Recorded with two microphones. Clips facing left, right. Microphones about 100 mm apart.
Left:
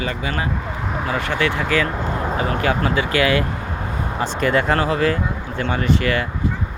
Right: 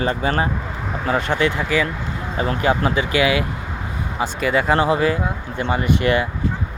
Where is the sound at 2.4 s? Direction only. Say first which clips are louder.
Right 3 dB; 25° right (ahead or behind); by 4.7 s 5° right (ahead or behind).